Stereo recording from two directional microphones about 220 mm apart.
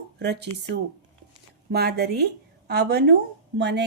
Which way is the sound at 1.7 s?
45° right (ahead or behind).